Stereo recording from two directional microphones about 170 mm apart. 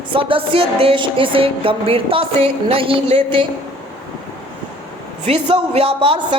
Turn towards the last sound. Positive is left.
turn(degrees=-30)  # may be behind; listen again after turning